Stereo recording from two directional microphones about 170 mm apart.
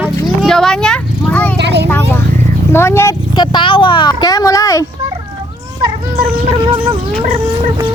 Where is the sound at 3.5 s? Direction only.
30° left (ahead or behind).